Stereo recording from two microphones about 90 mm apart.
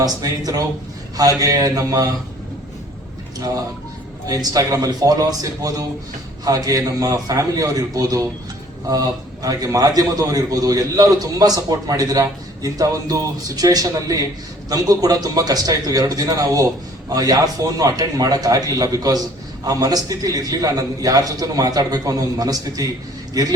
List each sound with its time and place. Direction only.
0.0 s a man's voice: 45° right (ahead or behind)
4.3 s a man's voice: 40° right (ahead or behind)